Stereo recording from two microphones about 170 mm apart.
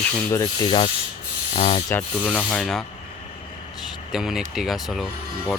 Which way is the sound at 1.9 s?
10° left (ahead or behind).